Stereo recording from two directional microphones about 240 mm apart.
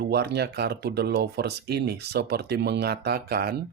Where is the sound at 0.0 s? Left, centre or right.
Right.